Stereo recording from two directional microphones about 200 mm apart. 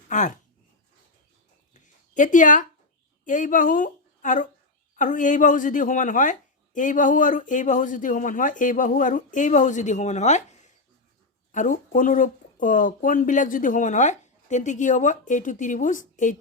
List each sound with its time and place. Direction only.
0.1 s speech: 40° left (ahead or behind)
1.7 s a sound: 40° left (ahead or behind)
3.2 s a woman's voice: 40° left (ahead or behind)